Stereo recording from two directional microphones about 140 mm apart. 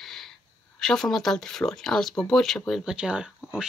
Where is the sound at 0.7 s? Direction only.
5° left (ahead or behind).